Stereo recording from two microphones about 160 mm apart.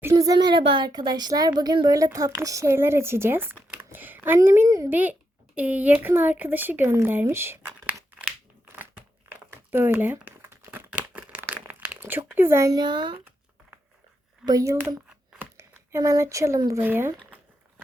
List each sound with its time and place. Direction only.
0.0 s speech: 20° right (ahead or behind)
8.6 s a sound: 10° right (ahead or behind)
9.7 s crumpling: 10° right (ahead or behind); by 13.1 s 30° right (ahead or behind)
14.4 s speech: 20° right (ahead or behind)